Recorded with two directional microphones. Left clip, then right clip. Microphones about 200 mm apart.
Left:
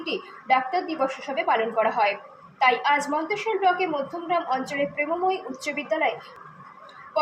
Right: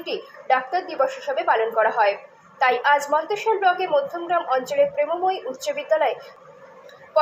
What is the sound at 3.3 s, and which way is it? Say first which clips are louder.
A woman's voice: even; 20° right (ahead or behind).